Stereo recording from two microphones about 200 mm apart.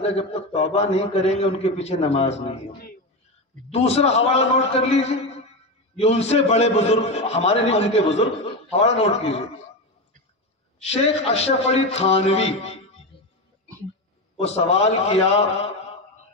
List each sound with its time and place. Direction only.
0.0 s a man's voice: 30° left (ahead or behind)
3.7 s a man's voice: 30° left (ahead or behind)
10.9 s a man's voice: 30° left (ahead or behind)
14.3 s a man's voice: 30° left (ahead or behind)